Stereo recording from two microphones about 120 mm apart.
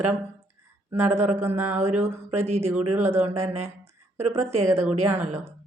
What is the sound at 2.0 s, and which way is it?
Speech, 65° right (ahead or behind).